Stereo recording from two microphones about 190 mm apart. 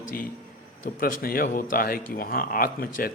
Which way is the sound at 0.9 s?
50° left (ahead or behind).